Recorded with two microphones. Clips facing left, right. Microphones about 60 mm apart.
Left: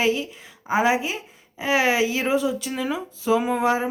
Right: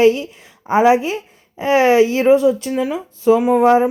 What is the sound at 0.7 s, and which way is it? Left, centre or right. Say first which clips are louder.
Speech: right 6 dB; centre.